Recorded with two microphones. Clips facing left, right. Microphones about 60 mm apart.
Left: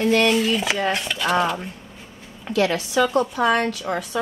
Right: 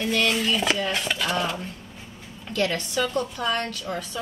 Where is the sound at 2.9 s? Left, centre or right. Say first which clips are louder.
Left 6 dB; left.